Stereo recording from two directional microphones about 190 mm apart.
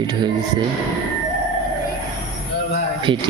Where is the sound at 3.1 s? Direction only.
25° right (ahead or behind).